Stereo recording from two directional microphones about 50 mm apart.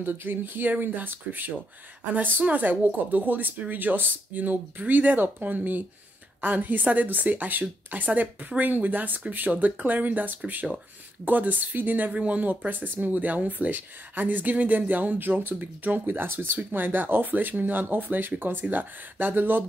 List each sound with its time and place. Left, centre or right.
0.0 s speech: right